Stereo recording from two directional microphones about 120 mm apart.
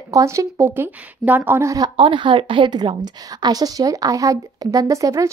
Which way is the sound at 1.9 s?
45° right (ahead or behind).